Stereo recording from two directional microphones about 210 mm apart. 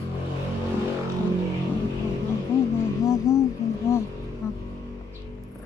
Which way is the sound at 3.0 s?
15° left (ahead or behind).